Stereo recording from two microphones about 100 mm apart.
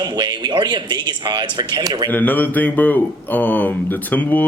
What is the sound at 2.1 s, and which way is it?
Speech, 15° left (ahead or behind).